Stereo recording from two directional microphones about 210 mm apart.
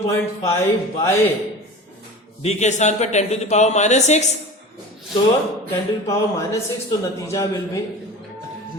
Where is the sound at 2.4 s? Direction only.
35° left (ahead or behind).